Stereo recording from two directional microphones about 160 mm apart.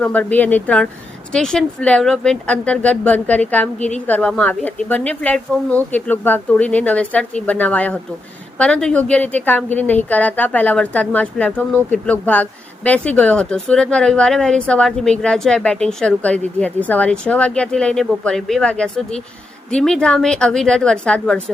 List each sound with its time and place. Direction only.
0.0 s a woman's voice: 10° left (ahead or behind)
3.8 s a woman's voice: 45° left (ahead or behind)
4.0 s a woman's voice: 10° left (ahead or behind)